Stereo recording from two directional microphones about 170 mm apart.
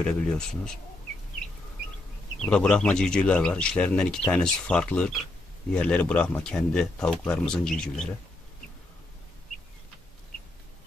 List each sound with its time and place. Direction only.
0.0 s speech: 5° left (ahead or behind)
2.4 s speech: 5° left (ahead or behind)